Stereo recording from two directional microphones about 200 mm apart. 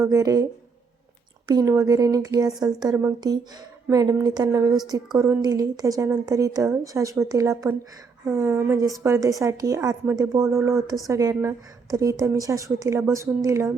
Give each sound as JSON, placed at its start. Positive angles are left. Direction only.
{"t": 0.0, "sound": "speech", "side_deg": -15}
{"t": 1.5, "sound": "speech", "side_deg": -15}